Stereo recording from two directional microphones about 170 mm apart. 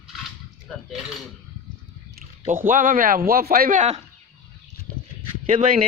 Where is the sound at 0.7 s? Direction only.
5° left (ahead or behind).